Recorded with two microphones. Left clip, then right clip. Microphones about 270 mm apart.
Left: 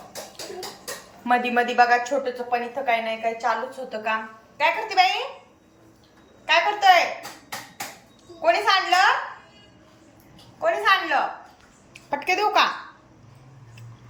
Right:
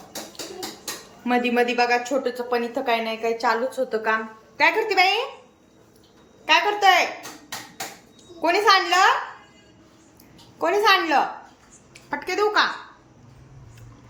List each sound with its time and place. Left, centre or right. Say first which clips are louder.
1.2 s a woman's voice: even; centre
6.4 s a woman's voice: right 1 dB; centre
8.4 s a woman's voice: right 2 dB; centre
10.6 s a woman's voice: right 2 dB; centre
12.2 s a woman's voice: left 1 dB; centre